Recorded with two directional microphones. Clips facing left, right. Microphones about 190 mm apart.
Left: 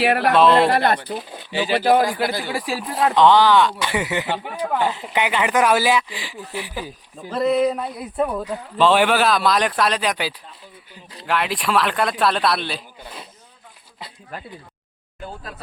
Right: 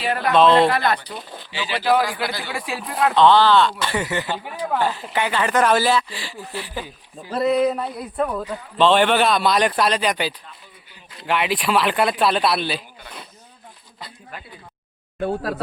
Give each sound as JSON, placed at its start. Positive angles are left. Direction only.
{"t": 0.0, "sound": "speech", "side_deg": 70}
{"t": 0.3, "sound": "speech", "side_deg": 5}
{"t": 0.8, "sound": "speech", "side_deg": 55}
{"t": 3.2, "sound": "speech", "side_deg": 15}
{"t": 7.3, "sound": "speech", "side_deg": 0}
{"t": 15.2, "sound": "speech", "side_deg": -70}